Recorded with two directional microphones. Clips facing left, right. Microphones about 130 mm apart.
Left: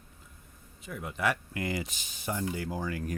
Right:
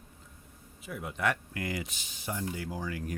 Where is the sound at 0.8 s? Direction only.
5° right (ahead or behind).